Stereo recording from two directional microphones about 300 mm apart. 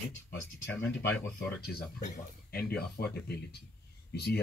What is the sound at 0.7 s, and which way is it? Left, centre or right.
Speech, left.